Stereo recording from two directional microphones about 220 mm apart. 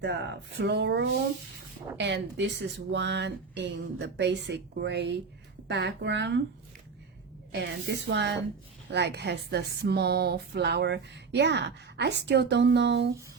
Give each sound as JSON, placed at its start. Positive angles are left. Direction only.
{"t": 0.0, "sound": "speech", "side_deg": -50}
{"t": 7.5, "sound": "speech", "side_deg": -50}